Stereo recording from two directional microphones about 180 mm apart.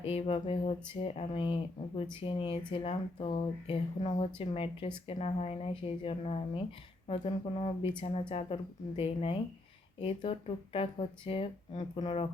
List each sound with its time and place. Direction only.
0.0 s speech: 35° left (ahead or behind)